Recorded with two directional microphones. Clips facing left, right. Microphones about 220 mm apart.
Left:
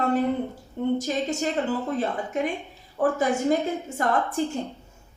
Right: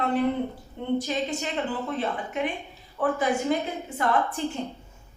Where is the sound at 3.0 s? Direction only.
45° left (ahead or behind).